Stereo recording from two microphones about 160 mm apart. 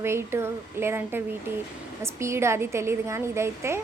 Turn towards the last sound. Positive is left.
turn(degrees=-15)  # may be behind; listen again after turning